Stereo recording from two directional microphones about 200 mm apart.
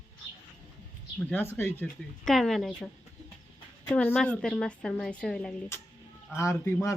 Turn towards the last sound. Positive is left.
turn(degrees=15)  # may be behind; listen again after turning